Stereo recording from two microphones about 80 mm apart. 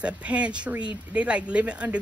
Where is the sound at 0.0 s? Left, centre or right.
Centre.